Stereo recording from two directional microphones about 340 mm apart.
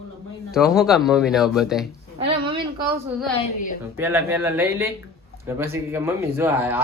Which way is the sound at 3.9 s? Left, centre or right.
Centre.